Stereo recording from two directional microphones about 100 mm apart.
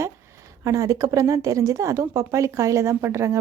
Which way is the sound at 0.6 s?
30° right (ahead or behind).